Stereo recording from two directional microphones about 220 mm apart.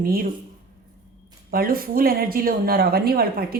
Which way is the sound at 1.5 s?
40° right (ahead or behind).